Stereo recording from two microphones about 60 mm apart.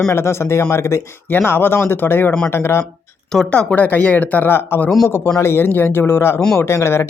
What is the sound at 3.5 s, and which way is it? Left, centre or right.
Speech, centre.